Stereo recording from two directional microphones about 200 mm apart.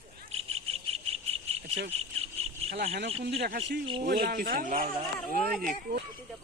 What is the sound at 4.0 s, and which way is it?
Speech, 55° right (ahead or behind).